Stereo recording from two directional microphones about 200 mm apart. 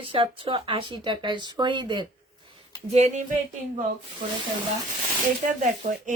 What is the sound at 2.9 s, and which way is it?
Speech, 35° right (ahead or behind).